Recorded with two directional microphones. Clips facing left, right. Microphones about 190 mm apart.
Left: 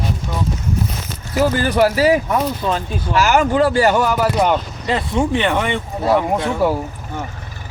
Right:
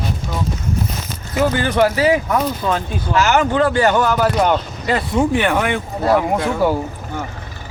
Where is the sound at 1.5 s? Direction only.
40° left (ahead or behind).